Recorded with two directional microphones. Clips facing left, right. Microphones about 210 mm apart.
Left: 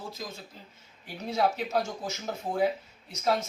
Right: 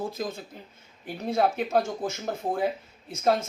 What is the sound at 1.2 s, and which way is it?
Speech, 55° right (ahead or behind).